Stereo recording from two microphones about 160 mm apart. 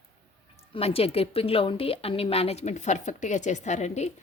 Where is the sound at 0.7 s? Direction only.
35° left (ahead or behind).